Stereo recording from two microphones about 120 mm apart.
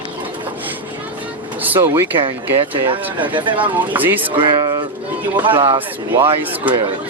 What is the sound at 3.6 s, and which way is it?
Speech, 15° right (ahead or behind).